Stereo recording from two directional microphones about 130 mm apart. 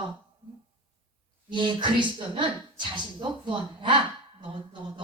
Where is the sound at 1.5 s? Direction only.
35° right (ahead or behind).